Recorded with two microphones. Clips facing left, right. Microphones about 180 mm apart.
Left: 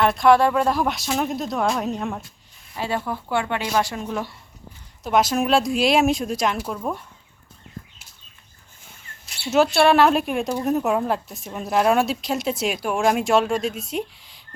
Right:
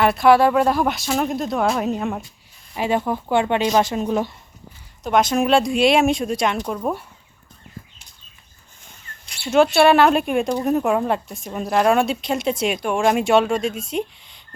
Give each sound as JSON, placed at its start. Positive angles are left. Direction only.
{"t": 0.0, "sound": "speech", "side_deg": -5}
{"t": 2.7, "sound": "speech", "side_deg": -15}
{"t": 5.0, "sound": "speech", "side_deg": 5}
{"t": 6.7, "sound": "speech", "side_deg": -10}
{"t": 8.9, "sound": "speech", "side_deg": 5}